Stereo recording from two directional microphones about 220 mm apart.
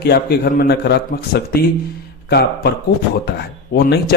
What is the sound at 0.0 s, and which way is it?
Speech, 45° left (ahead or behind).